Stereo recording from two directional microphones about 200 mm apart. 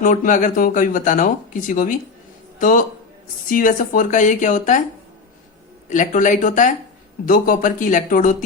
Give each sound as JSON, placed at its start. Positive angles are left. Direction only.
{"t": 0.0, "sound": "speech", "side_deg": 40}
{"t": 5.9, "sound": "speech", "side_deg": 40}